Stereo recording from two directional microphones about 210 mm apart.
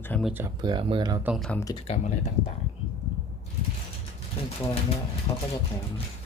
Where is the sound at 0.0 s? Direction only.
10° left (ahead or behind).